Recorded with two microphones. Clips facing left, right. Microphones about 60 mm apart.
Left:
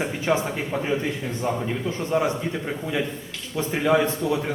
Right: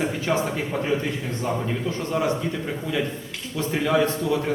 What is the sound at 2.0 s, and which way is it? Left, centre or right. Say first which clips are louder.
A man's voice: left 2 dB; centre.